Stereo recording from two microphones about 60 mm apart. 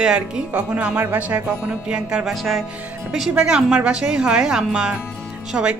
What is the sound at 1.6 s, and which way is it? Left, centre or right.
Speech, centre.